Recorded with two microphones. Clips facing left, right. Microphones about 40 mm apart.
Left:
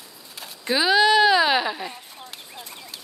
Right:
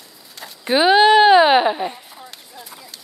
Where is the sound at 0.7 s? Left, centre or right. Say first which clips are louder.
Right 6 dB; right.